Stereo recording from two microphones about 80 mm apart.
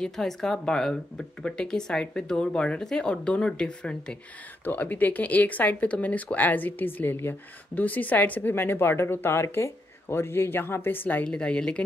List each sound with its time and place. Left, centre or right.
0.0 s speech: centre
4.6 s speech: left
11.2 s speech: centre